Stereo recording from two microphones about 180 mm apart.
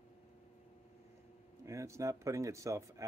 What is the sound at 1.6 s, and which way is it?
Speech, 15° right (ahead or behind).